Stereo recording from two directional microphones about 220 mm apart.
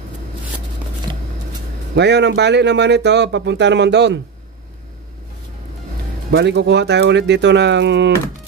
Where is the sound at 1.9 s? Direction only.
50° right (ahead or behind).